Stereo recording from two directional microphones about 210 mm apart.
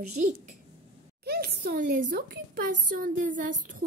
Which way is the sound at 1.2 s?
50° right (ahead or behind).